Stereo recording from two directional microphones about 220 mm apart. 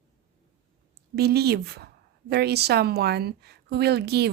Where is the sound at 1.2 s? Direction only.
45° right (ahead or behind).